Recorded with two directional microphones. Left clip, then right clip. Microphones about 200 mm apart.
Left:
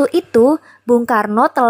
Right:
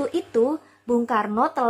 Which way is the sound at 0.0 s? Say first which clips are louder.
Left 10 dB; 35° left (ahead or behind).